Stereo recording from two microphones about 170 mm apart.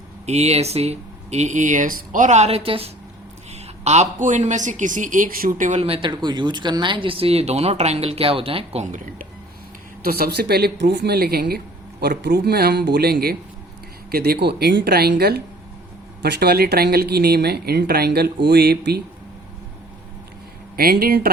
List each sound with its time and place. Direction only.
0.3 s a woman's voice: 40° right (ahead or behind)
10.0 s speech: 65° right (ahead or behind)
20.7 s speech: 60° right (ahead or behind)